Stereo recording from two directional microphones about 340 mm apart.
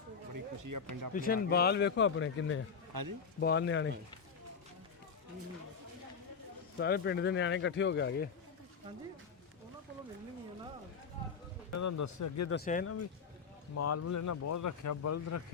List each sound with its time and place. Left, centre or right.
0.3 s speech: right
1.1 s speech: left
2.9 s speech: right
3.4 s speech: left
6.7 s speech: left
11.7 s speech: left
12.5 s speech: left
12.8 s speech: left